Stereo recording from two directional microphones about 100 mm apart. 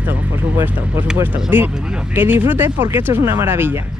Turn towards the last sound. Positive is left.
turn(degrees=-20)  # may be behind; listen again after turning